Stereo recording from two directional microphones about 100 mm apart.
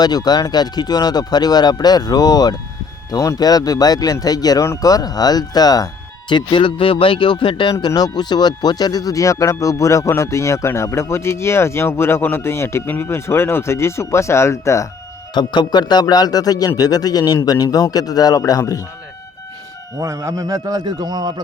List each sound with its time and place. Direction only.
0.0 s speech: 40° left (ahead or behind)
15.4 s speech: 50° left (ahead or behind)
20.0 s a man's voice: 35° right (ahead or behind)